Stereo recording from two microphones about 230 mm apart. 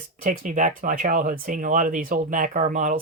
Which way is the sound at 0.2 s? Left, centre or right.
Right.